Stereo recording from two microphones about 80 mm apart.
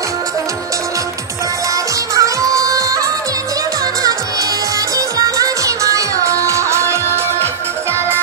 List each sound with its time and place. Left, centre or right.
2.1 s music: right
4.9 s music: right